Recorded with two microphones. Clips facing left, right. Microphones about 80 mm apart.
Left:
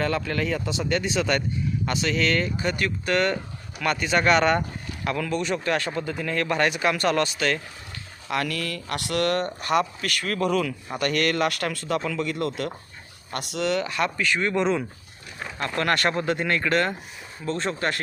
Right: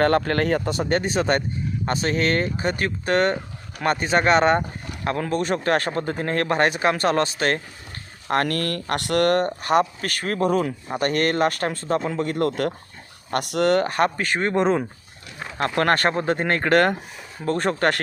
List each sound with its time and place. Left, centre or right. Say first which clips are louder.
0.0 s speech: right 6 dB; right